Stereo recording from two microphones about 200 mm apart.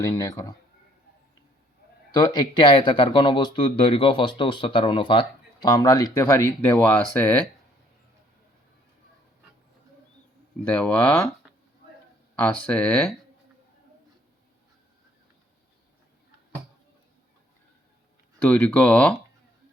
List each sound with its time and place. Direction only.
0.0 s speech: 15° left (ahead or behind)
2.1 s speech: 20° left (ahead or behind)
10.7 s speech: 5° left (ahead or behind)
12.4 s speech: 5° left (ahead or behind)
18.3 s speech: 5° left (ahead or behind)